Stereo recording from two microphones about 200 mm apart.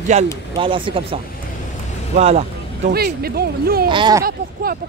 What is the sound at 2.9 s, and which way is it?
Speech, 50° right (ahead or behind).